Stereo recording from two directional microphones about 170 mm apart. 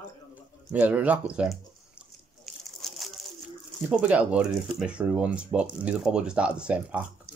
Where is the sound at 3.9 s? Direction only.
5° right (ahead or behind).